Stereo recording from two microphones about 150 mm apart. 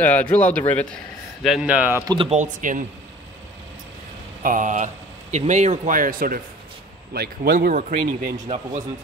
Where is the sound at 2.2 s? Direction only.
55° right (ahead or behind).